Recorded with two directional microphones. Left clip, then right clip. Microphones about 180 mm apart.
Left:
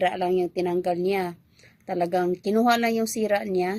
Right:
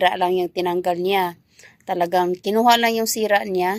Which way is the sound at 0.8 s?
40° right (ahead or behind).